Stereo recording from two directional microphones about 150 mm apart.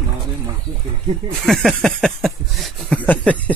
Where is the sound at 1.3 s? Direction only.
Centre (ahead or behind).